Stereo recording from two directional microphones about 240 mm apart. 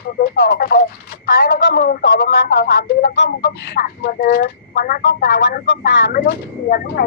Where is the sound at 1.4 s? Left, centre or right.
Left.